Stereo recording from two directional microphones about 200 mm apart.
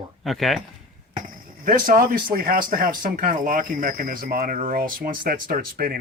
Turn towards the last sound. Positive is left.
turn(degrees=-45)  # may be behind; listen again after turning